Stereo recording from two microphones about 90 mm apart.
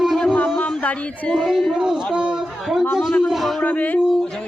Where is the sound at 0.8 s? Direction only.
15° left (ahead or behind).